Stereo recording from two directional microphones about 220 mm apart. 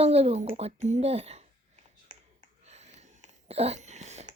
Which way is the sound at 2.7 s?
30° right (ahead or behind).